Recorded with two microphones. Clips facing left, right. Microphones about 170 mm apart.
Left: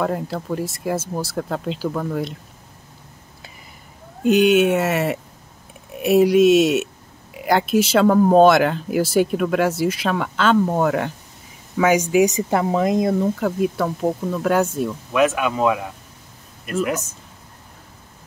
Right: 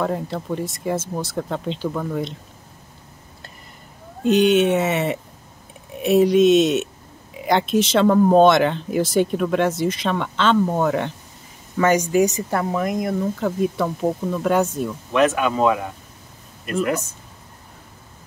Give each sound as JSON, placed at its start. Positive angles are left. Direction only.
{"t": 0.0, "sound": "speech", "side_deg": 0}
{"t": 4.2, "sound": "speech", "side_deg": 5}
{"t": 13.4, "sound": "speech", "side_deg": 5}